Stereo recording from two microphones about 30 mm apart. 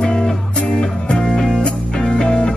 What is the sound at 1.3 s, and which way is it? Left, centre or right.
Music, centre.